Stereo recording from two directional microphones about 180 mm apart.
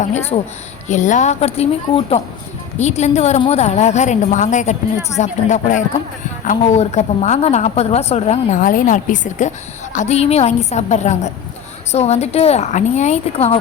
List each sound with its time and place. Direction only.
0.3 s a woman's voice: 35° left (ahead or behind)
2.7 s a woman's voice: 40° left (ahead or behind)